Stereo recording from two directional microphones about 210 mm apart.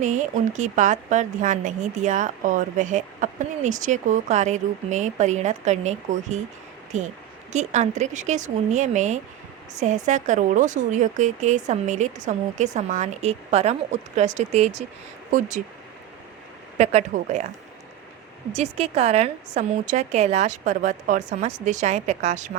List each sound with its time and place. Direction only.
0.0 s a woman's voice: 35° right (ahead or behind)
16.7 s a woman's voice: 35° right (ahead or behind)
18.5 s a woman's voice: 30° right (ahead or behind)